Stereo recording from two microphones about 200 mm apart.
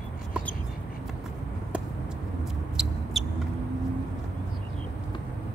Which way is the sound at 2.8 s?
5° right (ahead or behind).